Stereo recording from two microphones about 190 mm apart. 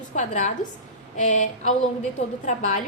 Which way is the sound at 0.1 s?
40° left (ahead or behind).